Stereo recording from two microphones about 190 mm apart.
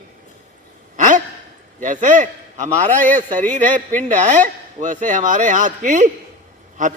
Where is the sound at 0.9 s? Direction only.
40° right (ahead or behind).